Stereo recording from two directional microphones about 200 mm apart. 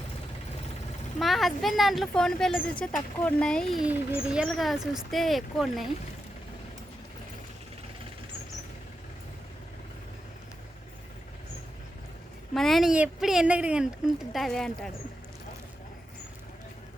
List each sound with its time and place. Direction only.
1.2 s speech: centre (ahead or behind)
12.5 s speech: centre (ahead or behind)